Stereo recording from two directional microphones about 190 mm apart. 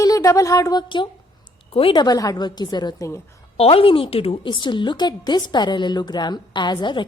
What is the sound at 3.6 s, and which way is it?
A woman's voice, 30° left (ahead or behind).